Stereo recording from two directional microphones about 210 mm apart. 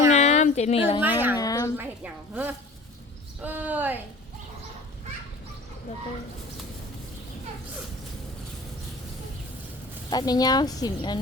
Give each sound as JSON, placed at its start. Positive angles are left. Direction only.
{"t": 0.1, "sound": "a sound", "side_deg": 35}
{"t": 1.0, "sound": "a woman's voice", "side_deg": -10}
{"t": 1.4, "sound": "a woman's voice", "side_deg": 15}
{"t": 1.7, "sound": "a woman's voice", "side_deg": -10}
{"t": 10.1, "sound": "a woman's voice", "side_deg": 20}